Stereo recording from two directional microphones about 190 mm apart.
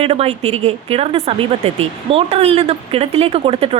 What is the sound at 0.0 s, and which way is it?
A woman's voice, 30° right (ahead or behind).